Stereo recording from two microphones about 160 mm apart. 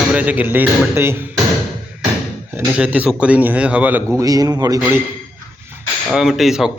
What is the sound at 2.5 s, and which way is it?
Speech, 10° right (ahead or behind).